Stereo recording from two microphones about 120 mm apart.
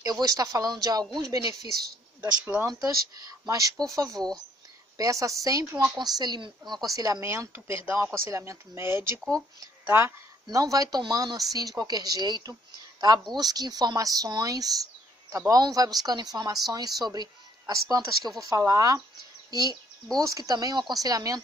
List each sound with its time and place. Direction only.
0.0 s speech: 30° right (ahead or behind)
2.4 s speech: 20° right (ahead or behind)
2.7 s speech: 30° right (ahead or behind)
10.4 s speech: 30° right (ahead or behind)